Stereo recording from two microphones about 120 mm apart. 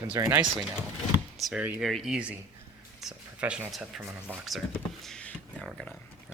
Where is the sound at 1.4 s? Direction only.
10° right (ahead or behind).